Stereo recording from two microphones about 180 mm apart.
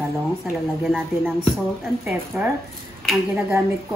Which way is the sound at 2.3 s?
10° right (ahead or behind).